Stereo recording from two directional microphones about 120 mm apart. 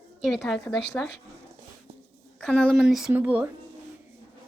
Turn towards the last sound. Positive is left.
turn(degrees=-15)  # may be behind; listen again after turning